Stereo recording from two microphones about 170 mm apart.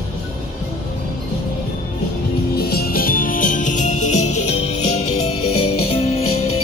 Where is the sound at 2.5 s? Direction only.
65° left (ahead or behind); by 5.3 s 40° left (ahead or behind).